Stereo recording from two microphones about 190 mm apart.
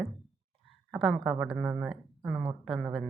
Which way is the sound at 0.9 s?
Centre (ahead or behind).